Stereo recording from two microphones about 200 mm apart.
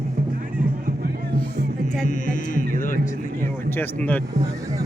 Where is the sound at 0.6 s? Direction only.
45° right (ahead or behind).